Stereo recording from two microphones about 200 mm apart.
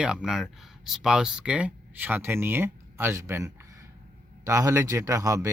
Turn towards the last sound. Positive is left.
turn(degrees=-15)  # may be behind; listen again after turning